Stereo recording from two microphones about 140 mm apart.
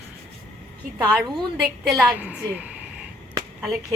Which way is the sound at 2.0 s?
10° right (ahead or behind).